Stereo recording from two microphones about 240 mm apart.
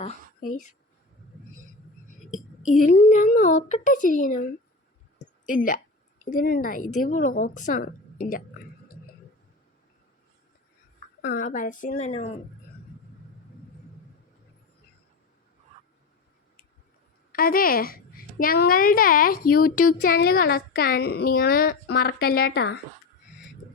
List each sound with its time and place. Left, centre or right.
0.0 s speech: left
2.6 s a woman's voice: left
5.2 s a sound: left
6.3 s a woman's voice: left
11.2 s a woman's voice: left
17.3 s a woman's voice: left